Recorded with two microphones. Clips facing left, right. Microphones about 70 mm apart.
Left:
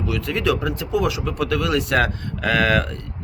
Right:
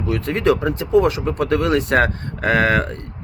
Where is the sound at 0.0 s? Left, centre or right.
Right.